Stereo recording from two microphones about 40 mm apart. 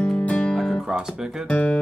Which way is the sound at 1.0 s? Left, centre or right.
Centre.